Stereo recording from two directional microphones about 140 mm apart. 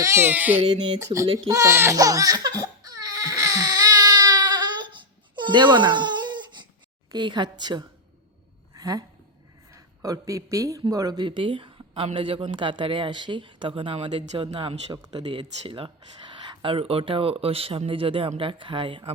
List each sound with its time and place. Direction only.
0.0 s speech: 20° right (ahead or behind)
0.9 s speech: 25° right (ahead or behind)
4.4 s baby cry: 30° right (ahead or behind)
7.1 s speech: 35° right (ahead or behind)
8.7 s a sound: 25° right (ahead or behind)
9.7 s speech: 25° right (ahead or behind)